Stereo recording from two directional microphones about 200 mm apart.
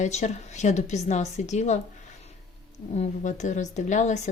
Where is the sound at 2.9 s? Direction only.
35° left (ahead or behind).